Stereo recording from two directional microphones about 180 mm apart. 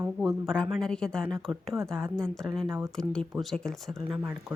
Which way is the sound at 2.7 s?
15° right (ahead or behind).